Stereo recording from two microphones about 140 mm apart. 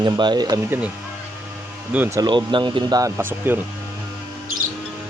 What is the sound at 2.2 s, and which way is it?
Speech, 35° right (ahead or behind).